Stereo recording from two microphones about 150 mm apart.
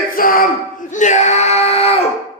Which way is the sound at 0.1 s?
70° left (ahead or behind).